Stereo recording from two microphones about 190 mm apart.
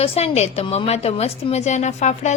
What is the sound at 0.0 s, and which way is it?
A woman's voice, 30° left (ahead or behind).